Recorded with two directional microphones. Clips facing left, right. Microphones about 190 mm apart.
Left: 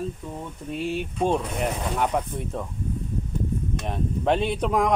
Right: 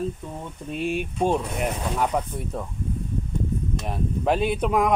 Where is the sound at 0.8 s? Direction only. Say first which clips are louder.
Right 1 dB; 15° right (ahead or behind).